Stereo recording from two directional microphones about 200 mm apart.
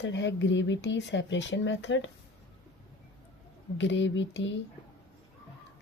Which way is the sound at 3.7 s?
65° left (ahead or behind).